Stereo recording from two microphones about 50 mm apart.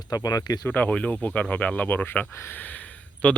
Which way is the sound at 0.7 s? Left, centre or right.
Left.